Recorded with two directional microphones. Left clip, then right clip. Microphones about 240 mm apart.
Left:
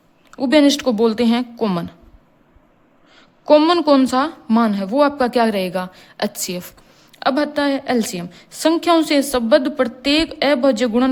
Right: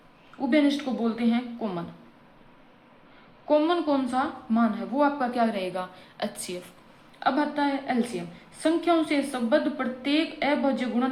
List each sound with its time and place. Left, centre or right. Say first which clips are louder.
0.3 s a woman's voice: left 10 dB; left
3.4 s a woman's voice: left 10 dB; left